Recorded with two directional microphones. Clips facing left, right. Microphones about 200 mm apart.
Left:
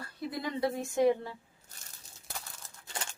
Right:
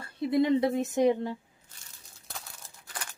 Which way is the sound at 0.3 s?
25° right (ahead or behind).